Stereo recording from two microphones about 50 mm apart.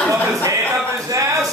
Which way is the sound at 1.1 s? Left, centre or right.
Right.